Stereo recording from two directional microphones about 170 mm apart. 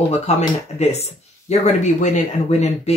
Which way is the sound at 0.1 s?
40° left (ahead or behind).